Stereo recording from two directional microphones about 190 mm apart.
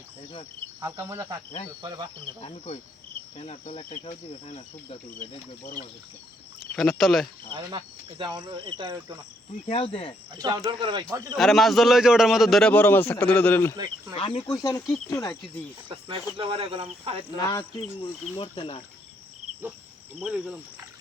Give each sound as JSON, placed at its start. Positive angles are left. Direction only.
{"t": 0.8, "sound": "cricket", "side_deg": -15}
{"t": 2.4, "sound": "speech", "side_deg": 30}
{"t": 3.3, "sound": "insect", "side_deg": 30}
{"t": 6.7, "sound": "a man's voice", "side_deg": 5}
{"t": 7.5, "sound": "cricket", "side_deg": -25}
{"t": 9.6, "sound": "speech", "side_deg": 30}
{"t": 10.3, "sound": "cricket", "side_deg": -20}
{"t": 11.3, "sound": "a man's voice", "side_deg": 0}
{"t": 14.2, "sound": "speech", "side_deg": 30}
{"t": 15.9, "sound": "cricket", "side_deg": -25}
{"t": 17.7, "sound": "speech", "side_deg": 25}
{"t": 20.1, "sound": "a man's voice", "side_deg": -5}